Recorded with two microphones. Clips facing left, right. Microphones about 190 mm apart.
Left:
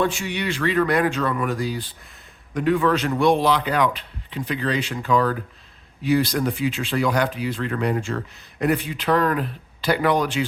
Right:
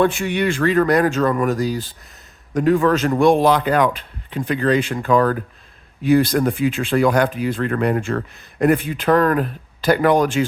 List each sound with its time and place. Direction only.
0.0 s speech: 55° right (ahead or behind)